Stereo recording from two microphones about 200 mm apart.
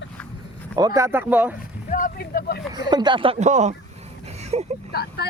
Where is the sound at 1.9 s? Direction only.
45° left (ahead or behind).